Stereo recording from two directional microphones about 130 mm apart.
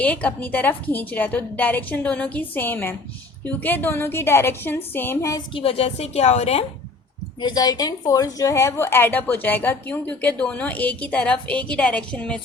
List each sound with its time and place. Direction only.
0.0 s a woman's voice: 10° left (ahead or behind)
5.5 s a woman's voice: 50° left (ahead or behind)
7.4 s a woman's voice: 30° left (ahead or behind); by 12.4 s 10° left (ahead or behind)